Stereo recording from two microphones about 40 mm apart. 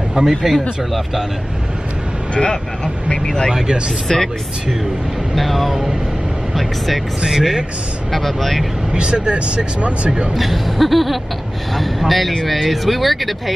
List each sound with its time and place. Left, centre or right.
0.3 s speech: centre
2.3 s speech: centre
3.5 s speech: right
4.1 s speech: centre
5.3 s speech: centre
7.2 s speech: centre
8.1 s speech: centre
8.9 s speech: right
10.3 s speech: centre